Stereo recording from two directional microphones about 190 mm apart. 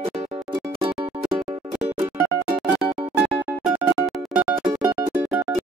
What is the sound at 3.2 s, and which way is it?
Music, 5° right (ahead or behind).